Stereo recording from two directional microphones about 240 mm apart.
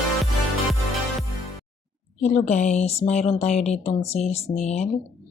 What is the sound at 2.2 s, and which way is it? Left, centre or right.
A woman's voice, left.